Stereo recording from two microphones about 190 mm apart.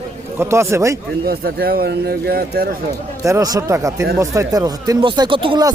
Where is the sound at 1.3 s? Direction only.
55° right (ahead or behind).